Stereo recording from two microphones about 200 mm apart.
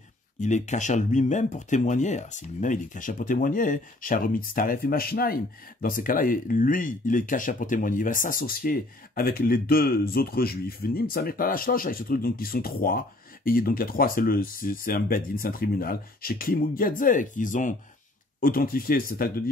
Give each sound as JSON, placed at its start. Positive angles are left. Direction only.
{"t": 0.4, "sound": "speech", "side_deg": 35}